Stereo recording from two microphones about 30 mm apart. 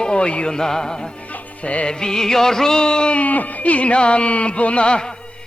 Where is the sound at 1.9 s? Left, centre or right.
Left.